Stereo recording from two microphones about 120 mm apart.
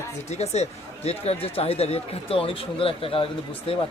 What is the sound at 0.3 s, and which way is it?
Speech, 65° left (ahead or behind).